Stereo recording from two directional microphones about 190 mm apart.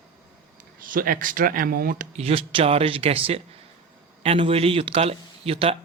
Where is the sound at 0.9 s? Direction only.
45° right (ahead or behind).